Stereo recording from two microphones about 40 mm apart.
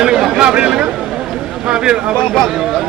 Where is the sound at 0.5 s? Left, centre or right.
Right.